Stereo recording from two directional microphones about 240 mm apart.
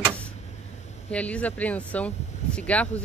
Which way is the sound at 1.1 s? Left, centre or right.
Centre.